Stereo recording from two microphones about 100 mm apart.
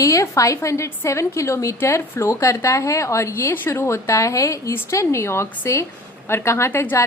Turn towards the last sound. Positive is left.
turn(degrees=20)  # may be behind; listen again after turning